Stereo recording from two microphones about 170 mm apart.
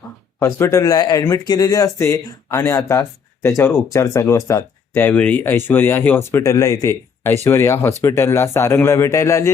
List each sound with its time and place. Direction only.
0.3 s speech: 15° left (ahead or behind)